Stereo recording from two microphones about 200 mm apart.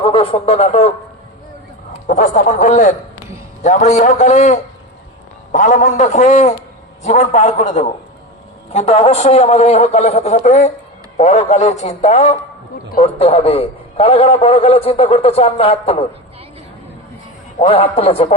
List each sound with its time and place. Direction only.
0.0 s a man's voice: 25° left (ahead or behind)
2.0 s a man's voice: 35° left (ahead or behind)
17.7 s a man's voice: 30° left (ahead or behind)